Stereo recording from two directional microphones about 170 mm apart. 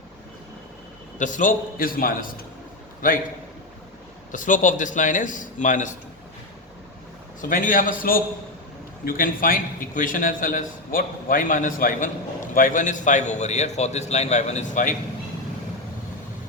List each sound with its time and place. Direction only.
1.2 s a man's voice: 50° left (ahead or behind)
4.3 s a man's voice: 50° left (ahead or behind)
7.4 s a man's voice: 50° left (ahead or behind)